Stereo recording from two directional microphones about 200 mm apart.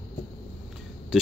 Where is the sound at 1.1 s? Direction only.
Centre (ahead or behind).